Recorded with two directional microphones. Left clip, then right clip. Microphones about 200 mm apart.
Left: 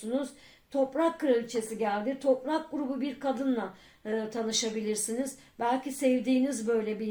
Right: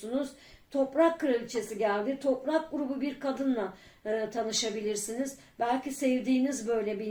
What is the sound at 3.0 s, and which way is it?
Speech, 30° left (ahead or behind).